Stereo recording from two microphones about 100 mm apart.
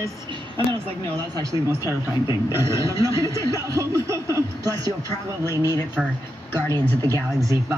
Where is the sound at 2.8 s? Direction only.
30° right (ahead or behind).